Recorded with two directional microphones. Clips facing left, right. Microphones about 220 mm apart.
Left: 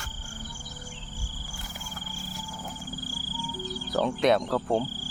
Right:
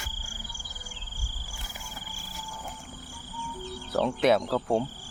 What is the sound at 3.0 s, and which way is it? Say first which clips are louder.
Music: left 4 dB; 30° left (ahead or behind).